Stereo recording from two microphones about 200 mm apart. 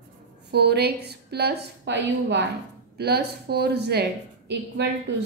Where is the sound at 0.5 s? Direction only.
55° right (ahead or behind).